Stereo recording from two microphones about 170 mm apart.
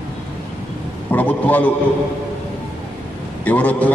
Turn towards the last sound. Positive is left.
turn(degrees=10)  # may be behind; listen again after turning